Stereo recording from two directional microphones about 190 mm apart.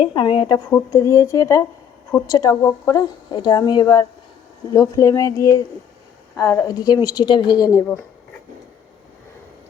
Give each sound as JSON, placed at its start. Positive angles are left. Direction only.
{"t": 0.0, "sound": "speech", "side_deg": 25}